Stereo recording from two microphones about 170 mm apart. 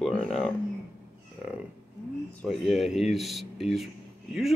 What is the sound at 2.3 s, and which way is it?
Speech, centre (ahead or behind).